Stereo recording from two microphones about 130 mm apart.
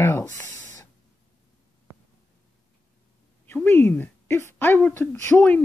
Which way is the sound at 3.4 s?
15° left (ahead or behind).